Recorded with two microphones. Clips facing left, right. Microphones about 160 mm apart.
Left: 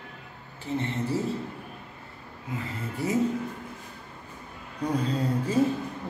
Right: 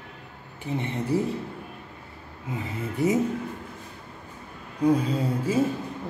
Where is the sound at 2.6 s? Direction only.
20° right (ahead or behind).